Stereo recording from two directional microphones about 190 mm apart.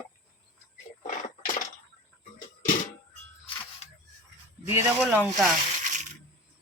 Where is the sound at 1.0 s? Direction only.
40° left (ahead or behind).